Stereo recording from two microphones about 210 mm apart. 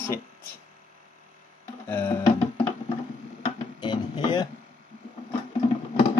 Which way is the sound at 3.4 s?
20° left (ahead or behind).